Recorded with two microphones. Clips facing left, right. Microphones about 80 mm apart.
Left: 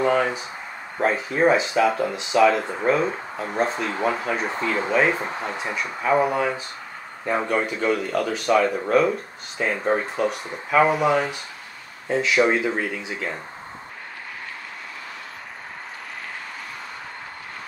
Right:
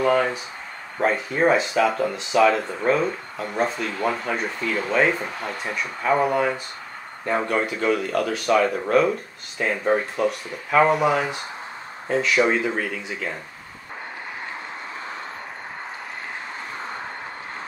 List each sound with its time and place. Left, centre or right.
0.0 s speech: centre
4.6 s speech: centre
4.9 s speech: centre